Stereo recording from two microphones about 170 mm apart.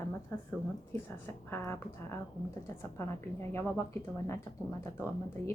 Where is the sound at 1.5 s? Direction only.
15° left (ahead or behind).